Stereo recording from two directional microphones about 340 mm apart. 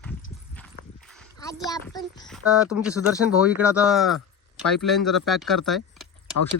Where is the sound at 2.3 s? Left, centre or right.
Centre.